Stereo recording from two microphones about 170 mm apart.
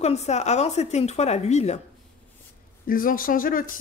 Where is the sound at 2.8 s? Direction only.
55° left (ahead or behind).